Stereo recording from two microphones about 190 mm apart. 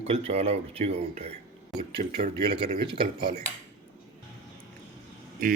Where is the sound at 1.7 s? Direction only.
Centre (ahead or behind).